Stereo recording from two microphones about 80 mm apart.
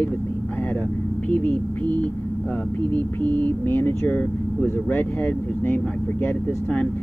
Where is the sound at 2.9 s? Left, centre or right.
Centre.